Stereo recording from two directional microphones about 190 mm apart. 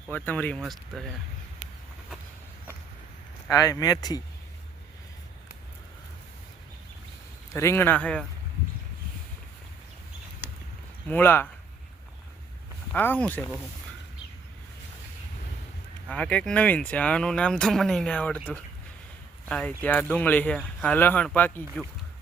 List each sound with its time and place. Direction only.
0.1 s speech: 10° left (ahead or behind)
3.5 s speech: 20° left (ahead or behind)
7.5 s speech: 15° left (ahead or behind)
11.1 s speech: 10° left (ahead or behind)
12.9 s speech: 10° left (ahead or behind)
16.0 s speech: 5° left (ahead or behind)
19.5 s speech: 5° left (ahead or behind)